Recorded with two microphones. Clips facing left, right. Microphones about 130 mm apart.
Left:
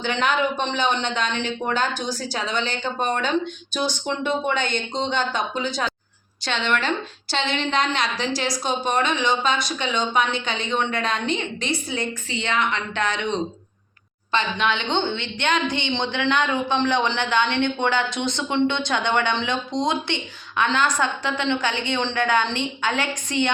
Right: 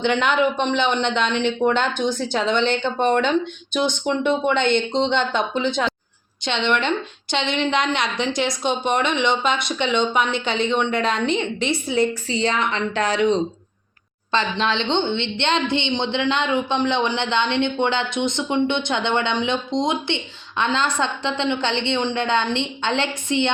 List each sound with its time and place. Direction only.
0.0 s a woman's voice: 20° right (ahead or behind)
14.3 s a woman's voice: 30° right (ahead or behind)